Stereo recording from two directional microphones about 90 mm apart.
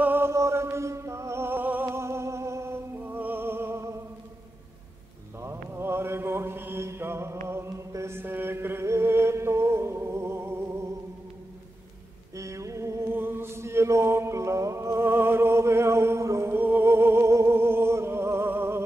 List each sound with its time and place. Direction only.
0.0 s chant: 20° right (ahead or behind)
0.3 s music: 30° right (ahead or behind)
5.4 s mantra: 30° right (ahead or behind)
12.4 s chant: 35° right (ahead or behind)